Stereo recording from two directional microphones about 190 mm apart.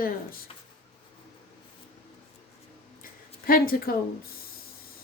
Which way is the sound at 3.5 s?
50° left (ahead or behind).